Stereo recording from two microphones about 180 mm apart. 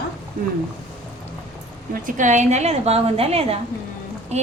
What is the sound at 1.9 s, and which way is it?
A woman's voice, 45° right (ahead or behind).